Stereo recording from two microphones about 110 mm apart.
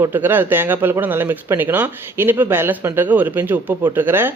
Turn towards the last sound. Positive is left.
turn(degrees=-20)  # may be behind; listen again after turning